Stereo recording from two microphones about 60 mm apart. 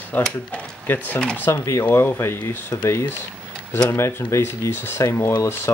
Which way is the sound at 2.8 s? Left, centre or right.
Left.